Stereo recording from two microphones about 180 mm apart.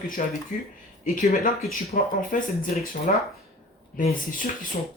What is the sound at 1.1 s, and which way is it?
Speech, 55° left (ahead or behind).